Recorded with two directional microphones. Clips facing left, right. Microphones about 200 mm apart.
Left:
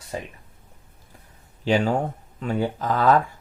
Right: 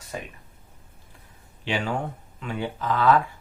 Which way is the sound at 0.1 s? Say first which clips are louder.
Left 3 dB; 30° left (ahead or behind).